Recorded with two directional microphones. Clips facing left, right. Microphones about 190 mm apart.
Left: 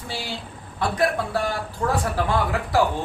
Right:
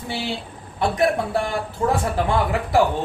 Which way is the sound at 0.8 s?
25° right (ahead or behind).